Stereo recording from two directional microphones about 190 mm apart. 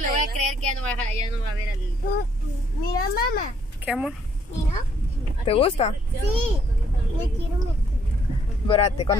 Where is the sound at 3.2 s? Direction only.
50° left (ahead or behind).